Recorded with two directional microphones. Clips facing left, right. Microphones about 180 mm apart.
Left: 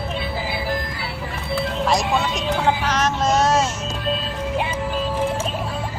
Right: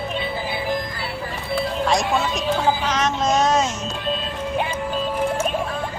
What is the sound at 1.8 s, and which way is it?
Music, centre (ahead or behind).